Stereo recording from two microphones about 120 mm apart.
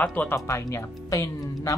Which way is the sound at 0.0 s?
15° left (ahead or behind).